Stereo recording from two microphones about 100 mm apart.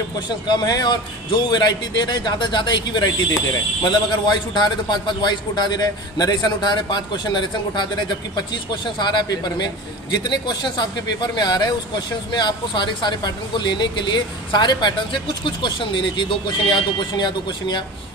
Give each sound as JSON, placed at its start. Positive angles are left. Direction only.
{"t": 0.5, "sound": "a man's voice", "side_deg": 45}